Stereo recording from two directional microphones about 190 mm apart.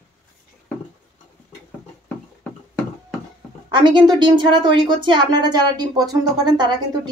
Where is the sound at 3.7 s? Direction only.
25° right (ahead or behind).